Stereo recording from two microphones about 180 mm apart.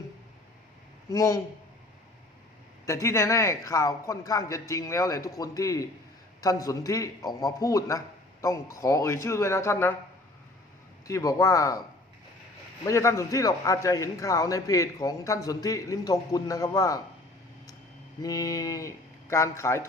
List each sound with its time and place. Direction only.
1.1 s a man's voice: 20° left (ahead or behind)
2.8 s a man's voice: 15° left (ahead or behind)
11.0 s a man's voice: 20° left (ahead or behind)
12.8 s a man's voice: 15° left (ahead or behind)
18.2 s a man's voice: 20° left (ahead or behind)